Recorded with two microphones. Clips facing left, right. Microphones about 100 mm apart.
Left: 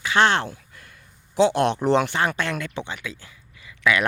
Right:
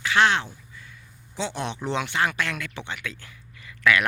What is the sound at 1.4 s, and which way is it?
Speech, 70° left (ahead or behind).